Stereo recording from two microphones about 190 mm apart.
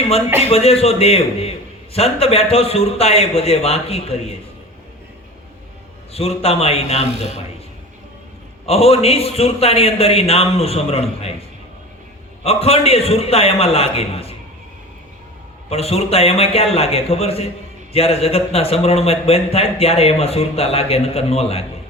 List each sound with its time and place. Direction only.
0.5 s a man's voice: 30° left (ahead or behind)
6.1 s a man's voice: 30° left (ahead or behind)
8.6 s a man's voice: 30° left (ahead or behind)
12.4 s a man's voice: 30° left (ahead or behind)
15.7 s a man's voice: 30° left (ahead or behind)